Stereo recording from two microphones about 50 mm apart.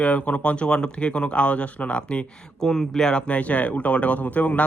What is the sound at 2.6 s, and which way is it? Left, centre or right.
A man's voice, centre.